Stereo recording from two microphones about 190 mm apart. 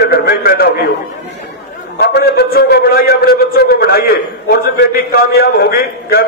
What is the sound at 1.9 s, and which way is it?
A man's voice, 60° left (ahead or behind).